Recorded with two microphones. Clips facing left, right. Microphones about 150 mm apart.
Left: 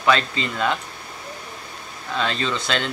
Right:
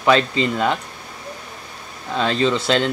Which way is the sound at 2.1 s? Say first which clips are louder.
Right 6 dB; 30° right (ahead or behind).